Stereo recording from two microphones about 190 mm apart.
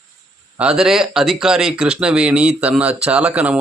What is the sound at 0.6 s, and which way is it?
Speech, 5° right (ahead or behind).